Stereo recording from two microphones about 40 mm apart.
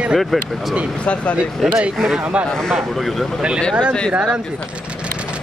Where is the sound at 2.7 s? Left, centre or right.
Centre.